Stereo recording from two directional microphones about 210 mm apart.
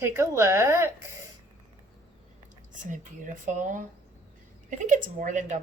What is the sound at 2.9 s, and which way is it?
A woman's voice, 35° right (ahead or behind).